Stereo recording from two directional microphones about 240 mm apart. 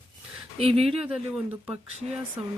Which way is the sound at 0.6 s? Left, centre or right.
Right.